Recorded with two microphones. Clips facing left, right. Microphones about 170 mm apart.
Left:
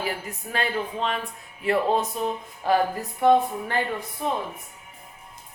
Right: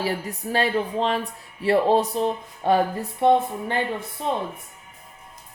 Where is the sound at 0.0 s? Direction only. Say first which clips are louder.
Right 4 dB; 35° right (ahead or behind).